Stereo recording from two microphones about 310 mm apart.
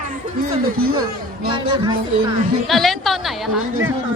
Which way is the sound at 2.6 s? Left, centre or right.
Centre.